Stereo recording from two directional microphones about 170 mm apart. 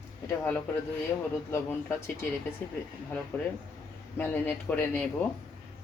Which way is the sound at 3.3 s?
10° left (ahead or behind).